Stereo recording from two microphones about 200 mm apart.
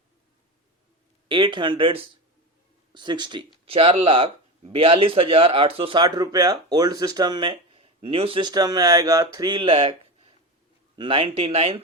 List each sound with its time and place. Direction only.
1.3 s speech: 25° right (ahead or behind)